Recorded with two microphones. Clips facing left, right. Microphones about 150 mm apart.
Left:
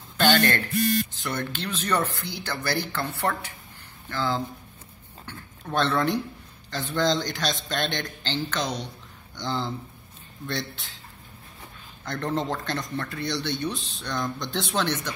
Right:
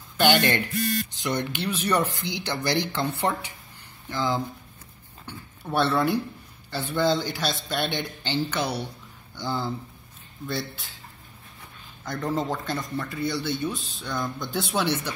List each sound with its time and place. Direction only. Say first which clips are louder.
0.2 s a man's voice: even; 15° right (ahead or behind)
12.0 s speech: even; centre (ahead or behind)